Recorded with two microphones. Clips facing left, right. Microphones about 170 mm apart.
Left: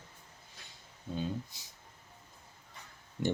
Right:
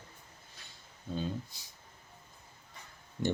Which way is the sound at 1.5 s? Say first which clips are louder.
Even; 20° left (ahead or behind).